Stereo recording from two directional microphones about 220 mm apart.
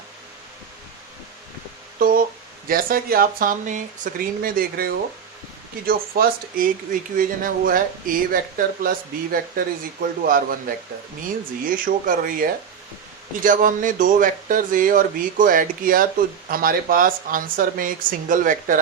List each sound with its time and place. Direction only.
2.0 s speech: 40° right (ahead or behind)
11.6 s speech: 40° right (ahead or behind)